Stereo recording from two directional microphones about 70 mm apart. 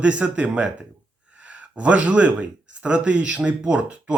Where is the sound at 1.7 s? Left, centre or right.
Centre.